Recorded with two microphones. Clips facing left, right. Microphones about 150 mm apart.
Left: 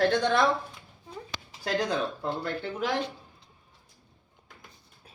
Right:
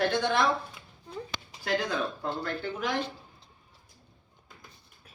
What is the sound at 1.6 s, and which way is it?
Speech, 30° left (ahead or behind).